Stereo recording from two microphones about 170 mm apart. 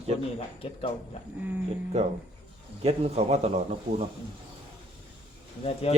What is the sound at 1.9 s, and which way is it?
A man's voice, 40° right (ahead or behind).